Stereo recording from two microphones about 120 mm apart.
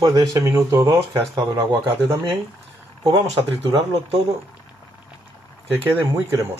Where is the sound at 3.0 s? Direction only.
45° right (ahead or behind).